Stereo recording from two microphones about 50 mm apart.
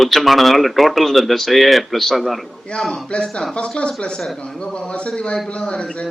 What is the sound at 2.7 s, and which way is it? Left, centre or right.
Speech, left.